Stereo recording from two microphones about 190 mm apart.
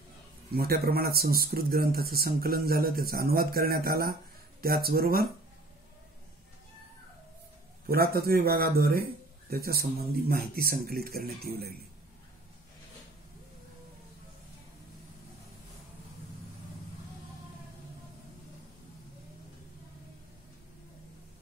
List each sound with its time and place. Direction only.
0.6 s speech: 55° right (ahead or behind)
7.8 s speech: 55° right (ahead or behind)